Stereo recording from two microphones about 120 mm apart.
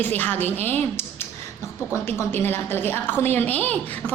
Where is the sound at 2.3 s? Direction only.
20° left (ahead or behind).